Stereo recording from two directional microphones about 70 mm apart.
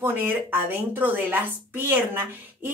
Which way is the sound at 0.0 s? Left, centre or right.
Right.